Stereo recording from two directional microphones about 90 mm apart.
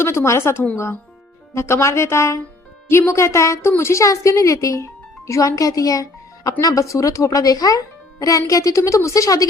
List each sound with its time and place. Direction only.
0.0 s speech: 30° left (ahead or behind)